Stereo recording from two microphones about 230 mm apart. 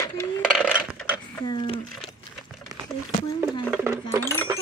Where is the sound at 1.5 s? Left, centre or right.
Left.